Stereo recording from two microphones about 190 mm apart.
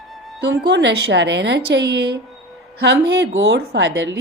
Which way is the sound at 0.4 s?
65° right (ahead or behind).